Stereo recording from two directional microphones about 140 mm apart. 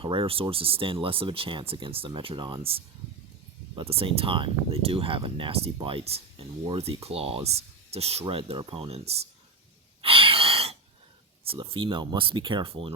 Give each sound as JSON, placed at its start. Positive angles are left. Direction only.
{"t": 0.0, "sound": "speech", "side_deg": -40}
{"t": 10.0, "sound": "a sound", "side_deg": -40}
{"t": 11.4, "sound": "speech", "side_deg": -40}